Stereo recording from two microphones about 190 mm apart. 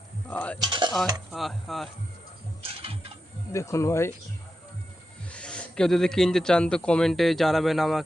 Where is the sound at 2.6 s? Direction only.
30° right (ahead or behind).